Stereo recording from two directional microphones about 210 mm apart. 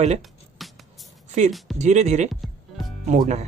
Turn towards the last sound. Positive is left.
turn(degrees=-35)  # may be behind; listen again after turning